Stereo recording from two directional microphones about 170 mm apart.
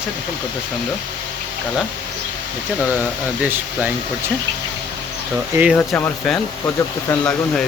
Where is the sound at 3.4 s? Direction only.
10° right (ahead or behind).